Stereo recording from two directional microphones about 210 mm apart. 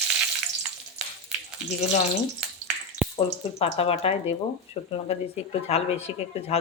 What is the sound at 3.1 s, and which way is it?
Speech, 30° left (ahead or behind).